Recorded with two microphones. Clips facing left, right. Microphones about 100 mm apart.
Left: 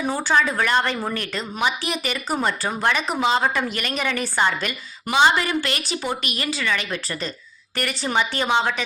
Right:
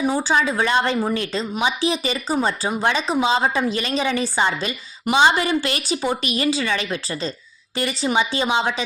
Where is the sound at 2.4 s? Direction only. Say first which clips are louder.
Right 2 dB; 15° right (ahead or behind).